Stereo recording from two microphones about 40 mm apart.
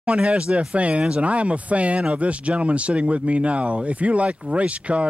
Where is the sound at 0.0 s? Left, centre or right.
Right.